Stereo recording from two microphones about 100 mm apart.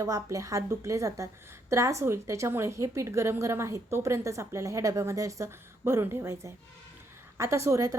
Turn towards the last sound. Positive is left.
turn(degrees=-30)  # may be behind; listen again after turning